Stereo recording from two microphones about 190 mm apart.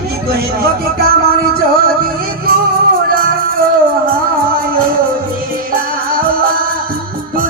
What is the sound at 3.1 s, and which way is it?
Music, 50° right (ahead or behind).